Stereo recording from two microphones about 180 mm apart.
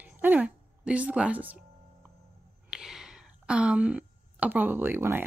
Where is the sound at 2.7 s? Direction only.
5° right (ahead or behind).